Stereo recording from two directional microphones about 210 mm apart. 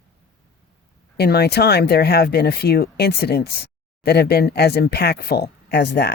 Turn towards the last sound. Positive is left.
turn(degrees=50)  # may be behind; listen again after turning